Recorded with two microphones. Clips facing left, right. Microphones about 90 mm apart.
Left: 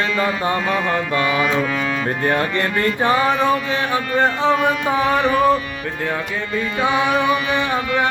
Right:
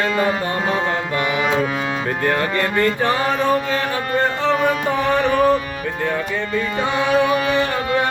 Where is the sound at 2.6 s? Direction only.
30° right (ahead or behind).